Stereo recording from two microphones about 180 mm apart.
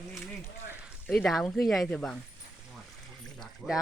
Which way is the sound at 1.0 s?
Centre (ahead or behind).